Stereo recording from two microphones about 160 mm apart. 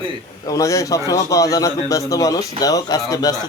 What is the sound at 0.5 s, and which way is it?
A man's voice, 20° left (ahead or behind).